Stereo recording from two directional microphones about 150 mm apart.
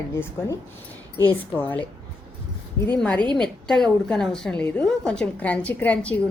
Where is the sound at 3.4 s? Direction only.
5° left (ahead or behind).